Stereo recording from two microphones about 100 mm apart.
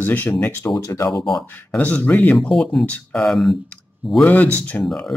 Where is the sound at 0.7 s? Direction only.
35° left (ahead or behind).